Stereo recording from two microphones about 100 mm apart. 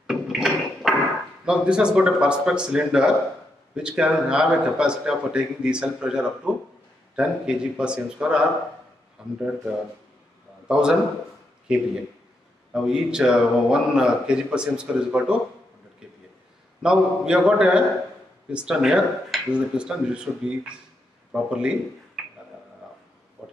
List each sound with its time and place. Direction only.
0.0 s a sound: centre (ahead or behind)
1.4 s speech: 10° right (ahead or behind)
10.7 s a man's voice: 5° right (ahead or behind)
16.8 s speech: 5° right (ahead or behind)
23.4 s oink: 5° right (ahead or behind)